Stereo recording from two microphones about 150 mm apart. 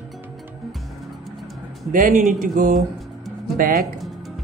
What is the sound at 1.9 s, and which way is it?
Speech, 55° right (ahead or behind).